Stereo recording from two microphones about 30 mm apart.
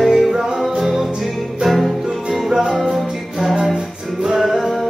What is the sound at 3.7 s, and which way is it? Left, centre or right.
Music, right.